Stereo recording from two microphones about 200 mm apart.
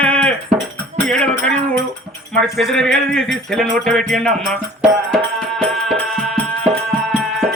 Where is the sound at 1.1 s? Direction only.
5° left (ahead or behind).